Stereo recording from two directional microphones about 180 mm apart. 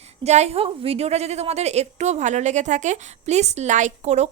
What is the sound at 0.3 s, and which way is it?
A woman's voice, 35° right (ahead or behind).